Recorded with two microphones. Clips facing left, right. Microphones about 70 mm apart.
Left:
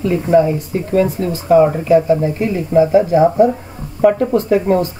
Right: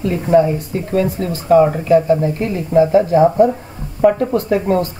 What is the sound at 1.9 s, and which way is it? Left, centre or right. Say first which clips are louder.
Speech: even; centre.